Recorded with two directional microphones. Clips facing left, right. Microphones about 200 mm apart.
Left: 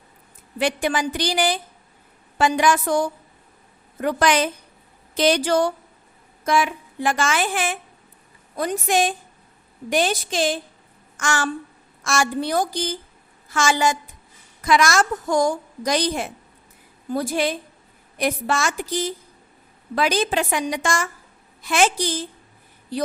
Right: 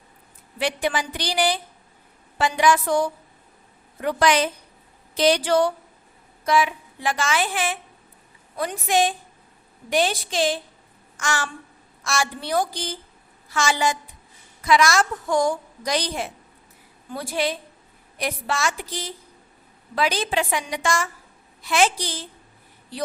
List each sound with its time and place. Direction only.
0.6 s a woman's voice: 45° left (ahead or behind)